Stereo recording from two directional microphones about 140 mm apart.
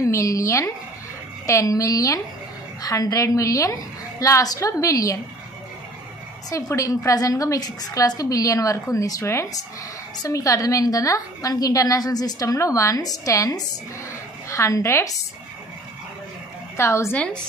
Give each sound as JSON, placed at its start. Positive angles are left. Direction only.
{"t": 0.0, "sound": "a woman's voice", "side_deg": 20}
{"t": 6.5, "sound": "a woman's voice", "side_deg": 25}
{"t": 16.7, "sound": "a woman's voice", "side_deg": 20}